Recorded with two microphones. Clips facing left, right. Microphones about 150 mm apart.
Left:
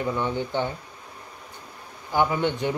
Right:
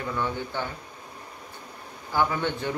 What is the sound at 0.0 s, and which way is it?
Speech, 20° left (ahead or behind).